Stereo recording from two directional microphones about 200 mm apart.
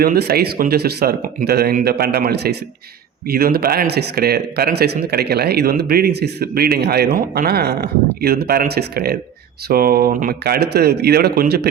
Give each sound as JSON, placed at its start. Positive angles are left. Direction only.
{"t": 0.0, "sound": "a man's voice", "side_deg": -50}